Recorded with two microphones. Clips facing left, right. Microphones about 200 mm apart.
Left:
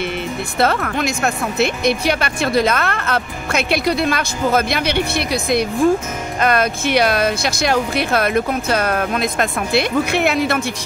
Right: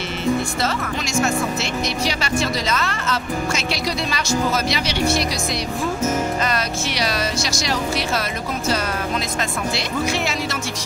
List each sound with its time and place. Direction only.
0.6 s speech: 60° left (ahead or behind)